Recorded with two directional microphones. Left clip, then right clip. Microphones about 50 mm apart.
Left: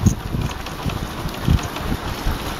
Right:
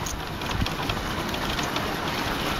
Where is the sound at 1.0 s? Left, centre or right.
Right.